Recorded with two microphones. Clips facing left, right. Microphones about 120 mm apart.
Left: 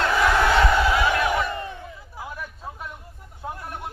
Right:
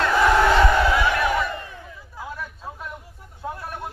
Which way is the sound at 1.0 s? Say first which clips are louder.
Even; 20° left (ahead or behind).